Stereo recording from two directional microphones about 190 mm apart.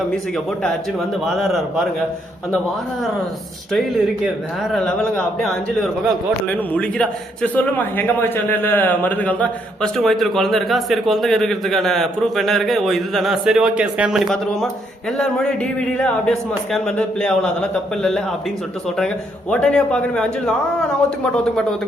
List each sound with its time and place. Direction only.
0.6 s a man's voice: centre (ahead or behind)
3.7 s a man's voice: centre (ahead or behind)
16.0 s a man's voice: 5° left (ahead or behind)